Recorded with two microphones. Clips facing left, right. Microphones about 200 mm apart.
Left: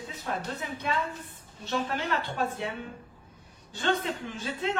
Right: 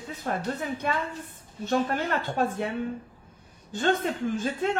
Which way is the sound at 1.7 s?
50° right (ahead or behind).